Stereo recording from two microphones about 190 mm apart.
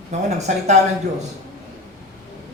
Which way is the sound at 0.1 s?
35° right (ahead or behind).